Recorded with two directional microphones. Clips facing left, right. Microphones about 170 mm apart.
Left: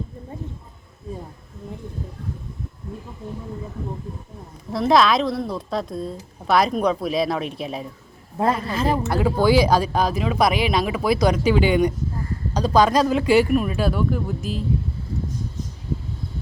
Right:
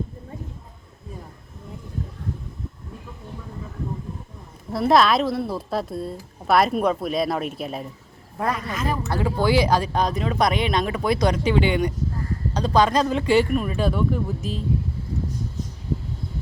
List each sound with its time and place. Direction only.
4.7 s a woman's voice: centre (ahead or behind)
8.4 s speech: 30° left (ahead or behind)
9.0 s speech: 15° left (ahead or behind)
11.4 s speech: 25° right (ahead or behind)
12.5 s speech: 10° left (ahead or behind)